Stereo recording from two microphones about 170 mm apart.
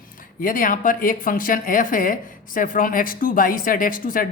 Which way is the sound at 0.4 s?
55° left (ahead or behind).